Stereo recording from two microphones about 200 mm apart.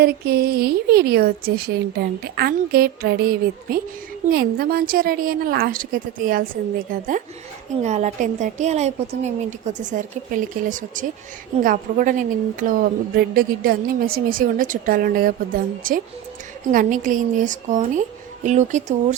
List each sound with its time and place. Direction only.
0.0 s a woman's voice: 50° right (ahead or behind)